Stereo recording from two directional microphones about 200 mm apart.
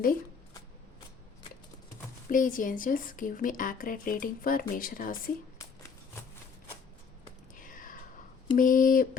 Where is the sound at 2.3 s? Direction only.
40° left (ahead or behind).